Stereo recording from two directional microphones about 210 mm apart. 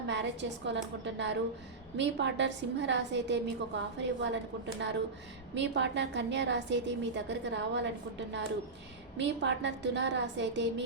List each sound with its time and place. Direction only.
0.1 s a woman's voice: 55° right (ahead or behind)
9.1 s a woman's voice: 55° right (ahead or behind)